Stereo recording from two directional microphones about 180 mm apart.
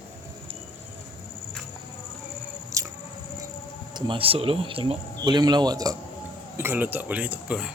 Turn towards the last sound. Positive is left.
turn(degrees=-5)  # may be behind; listen again after turning